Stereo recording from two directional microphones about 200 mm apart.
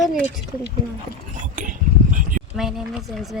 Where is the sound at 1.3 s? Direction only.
40° right (ahead or behind).